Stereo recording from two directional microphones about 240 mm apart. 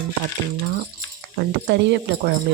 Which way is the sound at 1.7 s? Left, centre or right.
Right.